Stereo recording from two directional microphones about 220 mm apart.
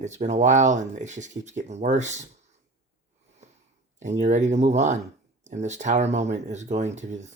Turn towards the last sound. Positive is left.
turn(degrees=-30)  # may be behind; listen again after turning